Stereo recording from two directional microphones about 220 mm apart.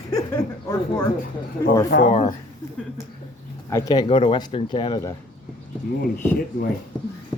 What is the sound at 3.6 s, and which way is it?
A man's voice, 15° left (ahead or behind).